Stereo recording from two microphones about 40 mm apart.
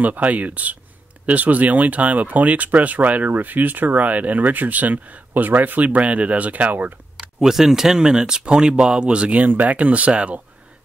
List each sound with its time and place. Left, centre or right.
0.0 s speech: right
7.2 s speech: centre; by 9.5 s right
9.5 s speech: right